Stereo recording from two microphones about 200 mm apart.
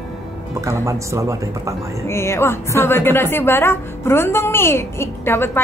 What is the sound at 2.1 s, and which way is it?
A woman's voice, 15° left (ahead or behind).